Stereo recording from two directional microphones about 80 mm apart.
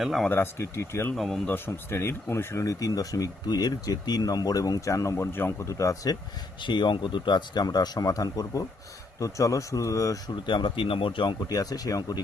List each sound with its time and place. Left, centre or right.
0.0 s speech: centre
0.3 s speech: left
1.1 s speech: centre
1.5 s speech: left
6.6 s speech: left
10.4 s speech: left
11.4 s speech: left